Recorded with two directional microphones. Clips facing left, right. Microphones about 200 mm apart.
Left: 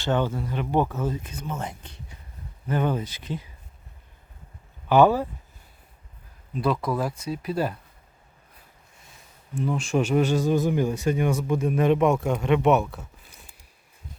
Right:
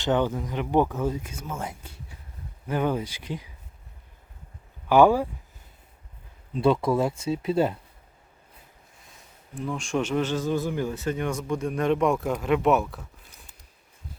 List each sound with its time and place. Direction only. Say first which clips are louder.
0.0 s speech: right 1 dB; 15° right (ahead or behind)
4.9 s speech: even; 10° right (ahead or behind)
6.8 s speech: right 3 dB; 25° right (ahead or behind)
9.6 s speech: left 3 dB; 5° left (ahead or behind)